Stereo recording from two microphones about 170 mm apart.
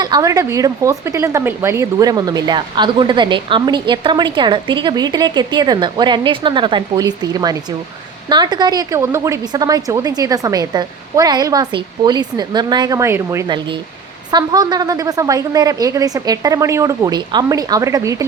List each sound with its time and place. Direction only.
0.0 s speech: 20° right (ahead or behind)